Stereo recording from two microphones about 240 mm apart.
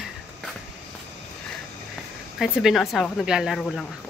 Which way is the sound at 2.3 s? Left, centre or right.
Centre.